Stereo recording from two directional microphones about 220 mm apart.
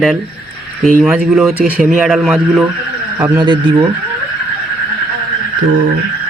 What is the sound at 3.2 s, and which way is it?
Speech, 20° right (ahead or behind).